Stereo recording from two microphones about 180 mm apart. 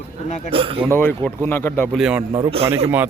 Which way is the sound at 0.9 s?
10° left (ahead or behind).